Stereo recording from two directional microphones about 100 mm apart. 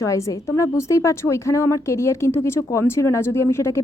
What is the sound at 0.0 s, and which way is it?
A woman's voice, 30° left (ahead or behind).